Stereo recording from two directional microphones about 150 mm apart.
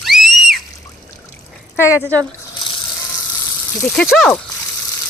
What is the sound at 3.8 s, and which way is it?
Speech, 5° left (ahead or behind).